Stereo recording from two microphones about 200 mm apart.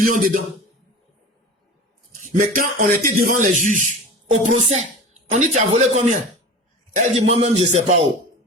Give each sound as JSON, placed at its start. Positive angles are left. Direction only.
{"t": 0.0, "sound": "a man's voice", "side_deg": -40}
{"t": 2.2, "sound": "a man's voice", "side_deg": -40}